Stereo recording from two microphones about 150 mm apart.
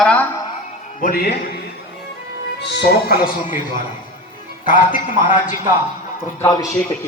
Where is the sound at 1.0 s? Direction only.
80° left.